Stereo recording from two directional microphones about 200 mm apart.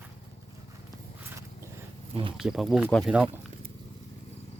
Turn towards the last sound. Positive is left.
turn(degrees=0)  # may be behind; listen again after turning